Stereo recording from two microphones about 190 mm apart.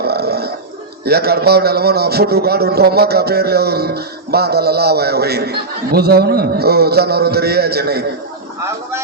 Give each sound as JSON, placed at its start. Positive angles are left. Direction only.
{"t": 0.0, "sound": "burping", "side_deg": -55}
{"t": 1.0, "sound": "a man's voice", "side_deg": -55}